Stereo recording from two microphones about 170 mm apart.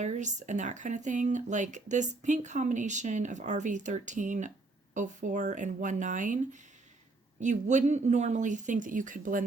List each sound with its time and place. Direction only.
0.0 s speech: 45° right (ahead or behind)